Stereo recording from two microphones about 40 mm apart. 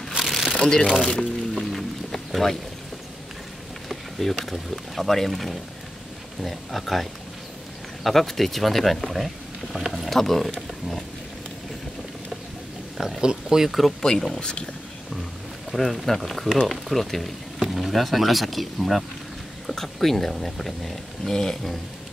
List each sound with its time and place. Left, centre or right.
0.2 s a sound: centre
0.5 s speech: centre
1.5 s music: centre
3.9 s speech: centre
12.9 s speech: centre
13.2 s speech: centre
13.7 s speech: centre
14.0 s speech: centre
15.7 s speech: centre